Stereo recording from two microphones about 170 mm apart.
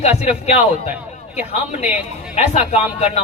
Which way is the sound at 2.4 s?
40° left (ahead or behind).